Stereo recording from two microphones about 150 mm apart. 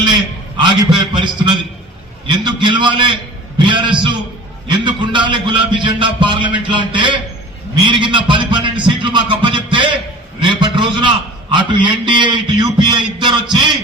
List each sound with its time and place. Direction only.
0.6 s a man's voice: 30° right (ahead or behind)